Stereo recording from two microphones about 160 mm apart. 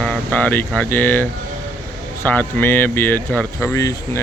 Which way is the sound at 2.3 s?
10° left (ahead or behind).